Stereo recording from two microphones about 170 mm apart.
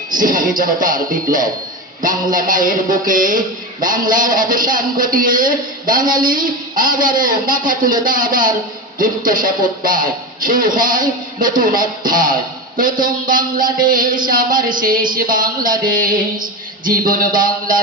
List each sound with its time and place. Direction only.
0.1 s speech: 50° right (ahead or behind)